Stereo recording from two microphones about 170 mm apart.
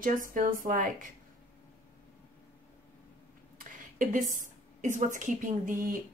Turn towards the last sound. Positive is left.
turn(degrees=-50)  # may be behind; listen again after turning